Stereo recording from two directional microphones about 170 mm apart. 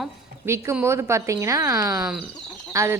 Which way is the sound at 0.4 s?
15° right (ahead or behind).